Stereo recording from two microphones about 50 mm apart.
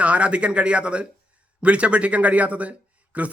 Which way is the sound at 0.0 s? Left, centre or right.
Right.